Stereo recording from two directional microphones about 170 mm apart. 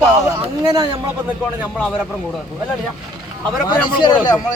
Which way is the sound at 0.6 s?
25° right (ahead or behind).